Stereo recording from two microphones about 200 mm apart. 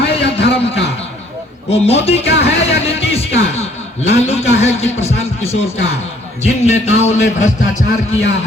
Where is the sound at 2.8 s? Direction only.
30° left (ahead or behind).